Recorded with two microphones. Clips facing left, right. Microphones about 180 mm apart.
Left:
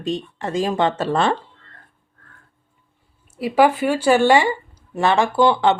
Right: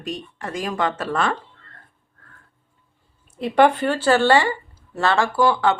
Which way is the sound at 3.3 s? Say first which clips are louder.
Even; 5° left (ahead or behind).